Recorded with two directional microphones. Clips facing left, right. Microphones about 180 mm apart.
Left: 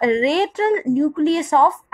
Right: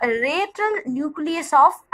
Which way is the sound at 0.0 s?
25° left (ahead or behind).